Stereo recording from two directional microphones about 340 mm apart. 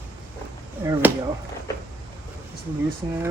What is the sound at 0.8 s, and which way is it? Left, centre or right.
Speech, centre.